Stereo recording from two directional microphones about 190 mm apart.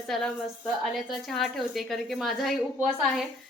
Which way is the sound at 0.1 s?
5° left (ahead or behind).